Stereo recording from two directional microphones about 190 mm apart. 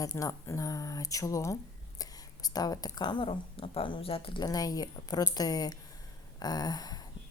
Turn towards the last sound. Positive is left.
turn(degrees=20)  # may be behind; listen again after turning